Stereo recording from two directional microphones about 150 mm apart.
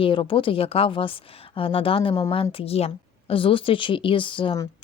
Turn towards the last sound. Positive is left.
turn(degrees=35)  # may be behind; listen again after turning